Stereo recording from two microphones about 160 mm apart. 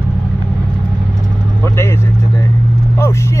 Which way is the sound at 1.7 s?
15° left (ahead or behind).